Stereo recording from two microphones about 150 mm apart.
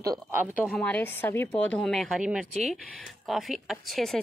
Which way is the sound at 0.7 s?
5° left (ahead or behind).